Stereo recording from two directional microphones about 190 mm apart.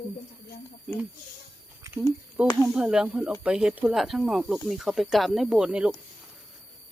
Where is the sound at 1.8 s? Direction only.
15° right (ahead or behind).